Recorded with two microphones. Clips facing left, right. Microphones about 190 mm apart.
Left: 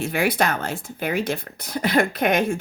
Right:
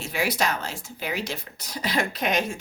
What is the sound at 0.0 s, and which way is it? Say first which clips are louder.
Speech: left 5 dB; 55° left (ahead or behind).